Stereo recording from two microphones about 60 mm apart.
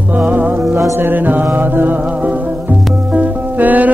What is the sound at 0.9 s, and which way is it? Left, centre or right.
Mantra, right.